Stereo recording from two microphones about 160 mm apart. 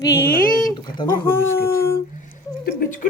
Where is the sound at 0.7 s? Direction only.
30° left (ahead or behind).